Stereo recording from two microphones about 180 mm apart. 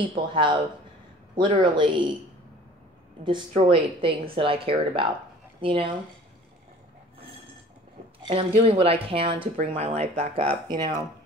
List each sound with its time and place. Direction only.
0.1 s speech: 25° right (ahead or behind)
3.3 s speech: 30° right (ahead or behind)
8.2 s speech: 30° right (ahead or behind)